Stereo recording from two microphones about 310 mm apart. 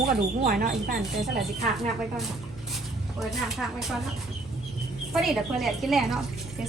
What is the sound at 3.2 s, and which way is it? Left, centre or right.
Speech, centre.